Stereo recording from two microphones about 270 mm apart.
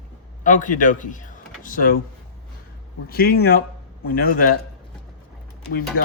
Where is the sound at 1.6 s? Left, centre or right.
Left.